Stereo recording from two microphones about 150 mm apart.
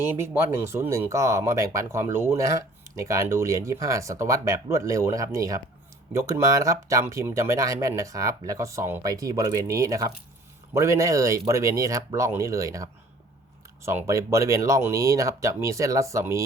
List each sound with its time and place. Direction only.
0.2 s speech: 15° right (ahead or behind)